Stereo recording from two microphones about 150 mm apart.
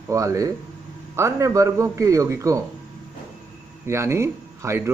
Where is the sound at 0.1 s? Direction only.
20° right (ahead or behind).